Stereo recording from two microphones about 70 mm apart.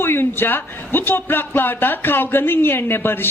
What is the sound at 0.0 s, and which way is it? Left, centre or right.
A man's voice, left.